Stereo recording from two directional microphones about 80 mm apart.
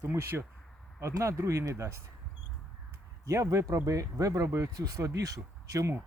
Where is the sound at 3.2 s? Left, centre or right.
Right.